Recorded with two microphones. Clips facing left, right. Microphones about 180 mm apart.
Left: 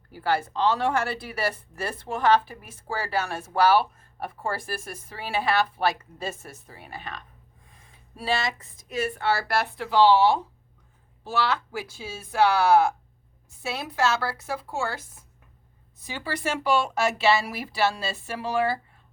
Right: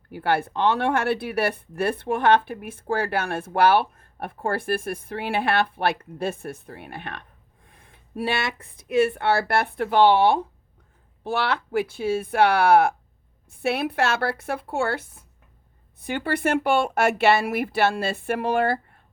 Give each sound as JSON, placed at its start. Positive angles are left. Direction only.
{"t": 0.1, "sound": "speech", "side_deg": -60}